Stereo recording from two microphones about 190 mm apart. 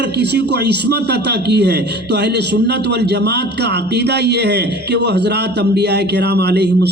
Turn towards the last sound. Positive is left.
turn(degrees=-60)  # may be behind; listen again after turning